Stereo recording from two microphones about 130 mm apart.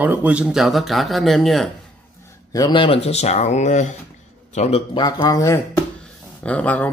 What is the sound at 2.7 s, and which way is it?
A man's voice, 45° left (ahead or behind).